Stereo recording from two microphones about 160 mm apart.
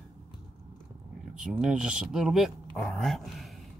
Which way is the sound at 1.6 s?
5° right (ahead or behind).